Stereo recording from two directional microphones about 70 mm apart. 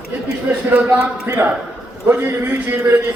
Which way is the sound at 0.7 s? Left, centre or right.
Right.